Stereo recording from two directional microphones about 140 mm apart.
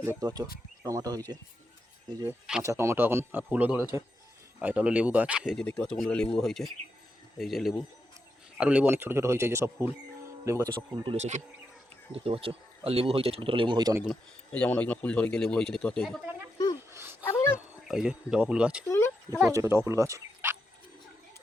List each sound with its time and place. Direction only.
0.0 s speech: 20° right (ahead or behind)
5.5 s speech: 5° left (ahead or behind); by 10.7 s 20° right (ahead or behind)
10.9 s speech: 35° right (ahead or behind)
11.2 s speech: 55° right (ahead or behind)
12.1 s speech: 40° right (ahead or behind)
14.5 s a man's voice: 10° left (ahead or behind)
16.9 s a sound: 15° right (ahead or behind)
17.2 s a sound: 15° left (ahead or behind)
17.8 s speech: 5° right (ahead or behind)
18.9 s a sound: 20° left (ahead or behind)
19.5 s speech: 20° right (ahead or behind)